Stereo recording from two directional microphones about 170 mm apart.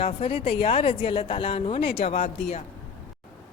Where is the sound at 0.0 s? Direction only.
35° left (ahead or behind).